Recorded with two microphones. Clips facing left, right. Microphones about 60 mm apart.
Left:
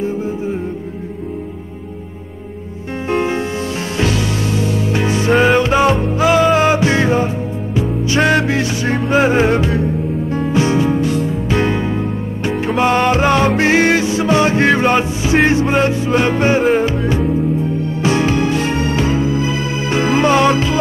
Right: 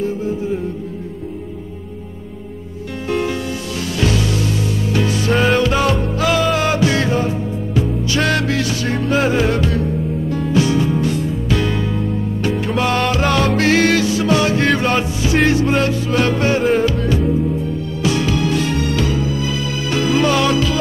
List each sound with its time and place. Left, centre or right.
0.0 s music: left
3.1 s music: left